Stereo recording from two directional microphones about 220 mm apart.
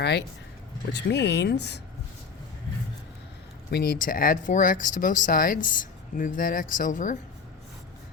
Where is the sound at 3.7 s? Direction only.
40° left (ahead or behind).